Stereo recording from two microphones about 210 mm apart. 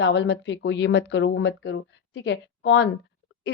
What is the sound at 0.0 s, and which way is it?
A woman's voice, 60° left (ahead or behind).